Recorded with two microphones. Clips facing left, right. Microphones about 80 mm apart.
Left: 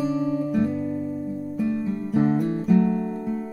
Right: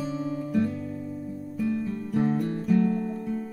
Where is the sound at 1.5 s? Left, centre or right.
Centre.